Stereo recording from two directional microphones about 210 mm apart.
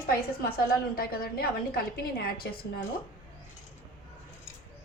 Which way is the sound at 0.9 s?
45° left (ahead or behind).